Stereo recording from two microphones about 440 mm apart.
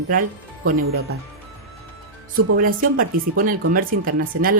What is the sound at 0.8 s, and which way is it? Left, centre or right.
Speech, right.